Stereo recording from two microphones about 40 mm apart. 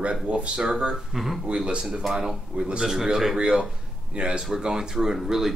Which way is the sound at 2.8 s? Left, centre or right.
Centre.